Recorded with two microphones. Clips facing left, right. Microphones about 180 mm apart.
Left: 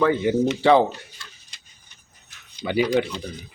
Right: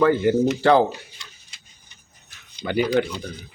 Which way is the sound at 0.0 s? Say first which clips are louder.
Right 2 dB; centre (ahead or behind).